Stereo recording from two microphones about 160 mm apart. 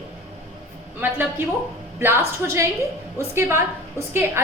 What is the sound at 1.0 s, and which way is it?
A woman's voice, 10° right (ahead or behind).